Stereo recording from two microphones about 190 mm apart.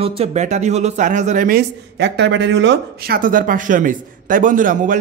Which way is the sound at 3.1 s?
45° right (ahead or behind).